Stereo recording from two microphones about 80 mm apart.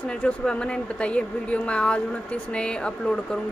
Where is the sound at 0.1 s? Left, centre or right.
Centre.